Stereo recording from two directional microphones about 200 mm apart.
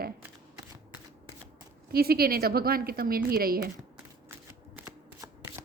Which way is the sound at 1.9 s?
50° right (ahead or behind).